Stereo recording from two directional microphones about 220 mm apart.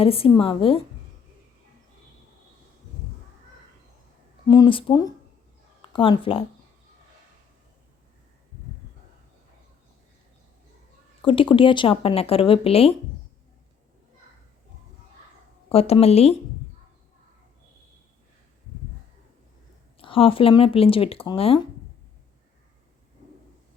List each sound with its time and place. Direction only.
0.0 s speech: 25° left (ahead or behind)
4.4 s speech: 20° left (ahead or behind)
11.2 s speech: 25° left (ahead or behind)
15.7 s speech: 25° left (ahead or behind)
20.0 s speech: 25° left (ahead or behind)